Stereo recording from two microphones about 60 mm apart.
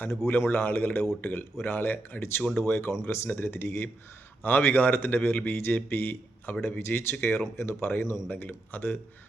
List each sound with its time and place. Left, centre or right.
0.3 s speech: left
8.3 s speech: left